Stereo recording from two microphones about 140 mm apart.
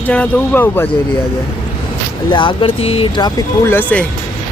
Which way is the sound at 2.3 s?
35° left (ahead or behind).